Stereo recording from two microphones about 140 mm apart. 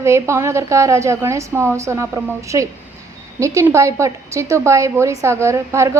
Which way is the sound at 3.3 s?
20° right (ahead or behind).